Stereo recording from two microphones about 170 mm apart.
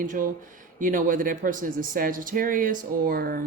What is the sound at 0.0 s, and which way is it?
Speech, 50° right (ahead or behind).